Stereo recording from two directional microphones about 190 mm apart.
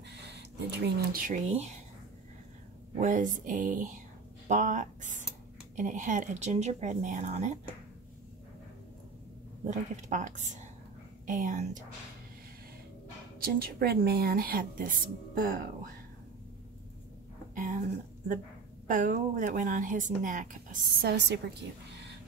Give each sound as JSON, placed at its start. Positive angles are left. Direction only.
{"t": 0.1, "sound": "speech", "side_deg": -65}
{"t": 3.0, "sound": "speech", "side_deg": -40}
{"t": 9.7, "sound": "speech", "side_deg": -40}
{"t": 13.4, "sound": "speech", "side_deg": -55}
{"t": 17.6, "sound": "speech", "side_deg": -45}
{"t": 21.0, "sound": "a woman's voice", "side_deg": -60}